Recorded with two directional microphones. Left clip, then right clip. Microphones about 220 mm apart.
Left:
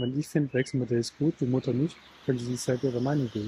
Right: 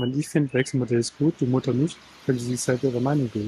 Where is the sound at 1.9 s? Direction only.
55° right (ahead or behind).